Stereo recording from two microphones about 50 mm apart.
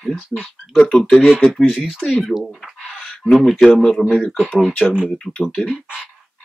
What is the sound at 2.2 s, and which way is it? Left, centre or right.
Speech, centre.